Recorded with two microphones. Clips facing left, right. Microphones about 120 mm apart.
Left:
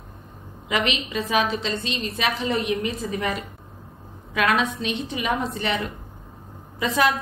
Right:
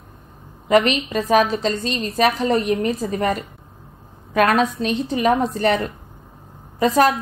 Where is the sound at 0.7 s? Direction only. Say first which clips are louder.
Right 9 dB; 40° right (ahead or behind).